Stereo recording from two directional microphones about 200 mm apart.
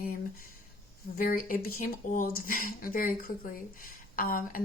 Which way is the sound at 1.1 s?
45° left (ahead or behind).